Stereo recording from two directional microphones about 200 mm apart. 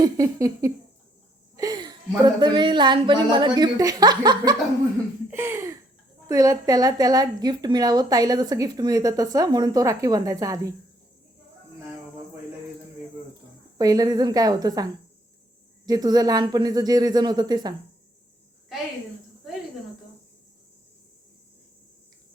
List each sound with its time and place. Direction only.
0.0 s a sound: 15° right (ahead or behind)
1.5 s a woman's voice: 20° right (ahead or behind)
5.3 s a sound: 15° right (ahead or behind)
6.2 s a woman's voice: 15° right (ahead or behind)
13.7 s a woman's voice: 20° right (ahead or behind)
15.9 s a woman's voice: 20° right (ahead or behind)